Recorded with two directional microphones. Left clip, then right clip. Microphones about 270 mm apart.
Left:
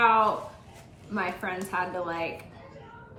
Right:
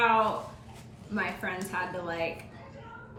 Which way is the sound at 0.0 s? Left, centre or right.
Centre.